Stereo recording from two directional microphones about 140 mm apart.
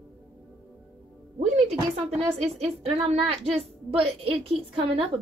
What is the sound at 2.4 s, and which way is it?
A woman's voice, 45° right (ahead or behind).